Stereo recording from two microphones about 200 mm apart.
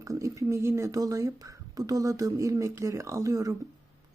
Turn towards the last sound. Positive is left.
turn(degrees=-15)  # may be behind; listen again after turning